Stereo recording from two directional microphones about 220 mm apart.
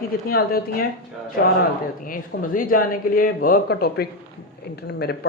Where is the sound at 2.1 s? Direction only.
40° left (ahead or behind).